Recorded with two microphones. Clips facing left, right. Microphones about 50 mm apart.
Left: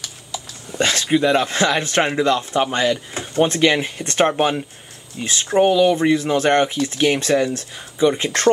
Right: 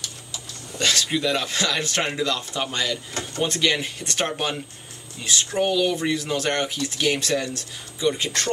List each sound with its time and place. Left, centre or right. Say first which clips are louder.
0.7 s speech: left 5 dB; left